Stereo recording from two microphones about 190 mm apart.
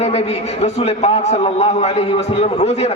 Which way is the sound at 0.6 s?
35° left (ahead or behind).